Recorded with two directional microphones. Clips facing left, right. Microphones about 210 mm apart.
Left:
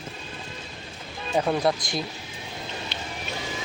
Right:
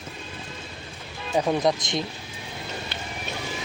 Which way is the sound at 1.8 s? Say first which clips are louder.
Right 2 dB; 20° right (ahead or behind).